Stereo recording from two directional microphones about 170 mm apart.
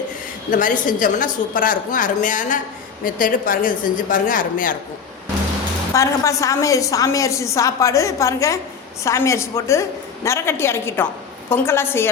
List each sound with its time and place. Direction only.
0.5 s a woman's voice: 50° left (ahead or behind)
5.9 s a woman's voice: 20° left (ahead or behind)